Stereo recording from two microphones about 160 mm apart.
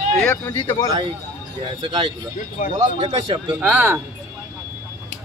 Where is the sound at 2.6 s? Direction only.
55° left (ahead or behind).